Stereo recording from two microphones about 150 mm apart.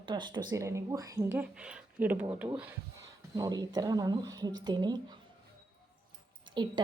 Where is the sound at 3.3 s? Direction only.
25° right (ahead or behind).